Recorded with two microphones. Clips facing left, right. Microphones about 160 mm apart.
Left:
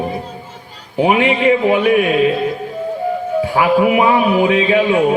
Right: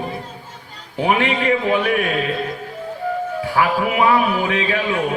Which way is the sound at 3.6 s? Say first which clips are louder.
Left 5 dB; 20° left (ahead or behind).